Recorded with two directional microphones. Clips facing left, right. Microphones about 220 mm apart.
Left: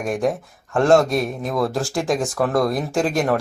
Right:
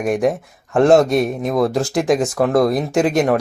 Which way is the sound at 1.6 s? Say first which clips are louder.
Right 4 dB; centre (ahead or behind).